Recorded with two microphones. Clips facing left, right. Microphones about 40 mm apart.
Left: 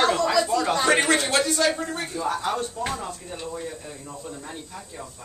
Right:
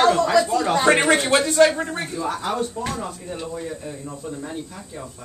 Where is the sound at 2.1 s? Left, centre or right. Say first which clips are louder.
Right 1 dB; centre.